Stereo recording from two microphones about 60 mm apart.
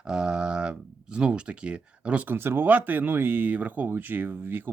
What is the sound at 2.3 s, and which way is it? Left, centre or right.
Speech, right.